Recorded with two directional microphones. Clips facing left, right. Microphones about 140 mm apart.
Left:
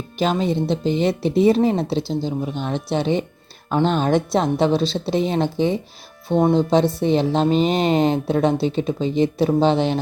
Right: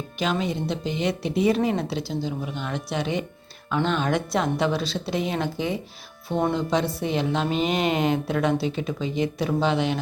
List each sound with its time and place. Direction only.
0.2 s a woman's voice: 35° left (ahead or behind)